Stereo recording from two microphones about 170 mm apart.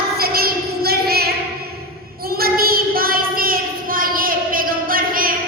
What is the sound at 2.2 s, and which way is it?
Child singing, 60° right (ahead or behind).